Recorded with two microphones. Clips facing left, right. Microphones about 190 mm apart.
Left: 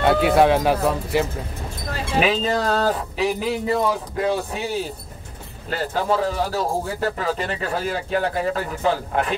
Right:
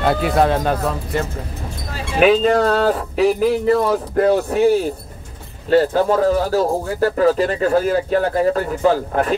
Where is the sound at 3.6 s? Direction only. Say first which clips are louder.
Right 5 dB; 50° right (ahead or behind).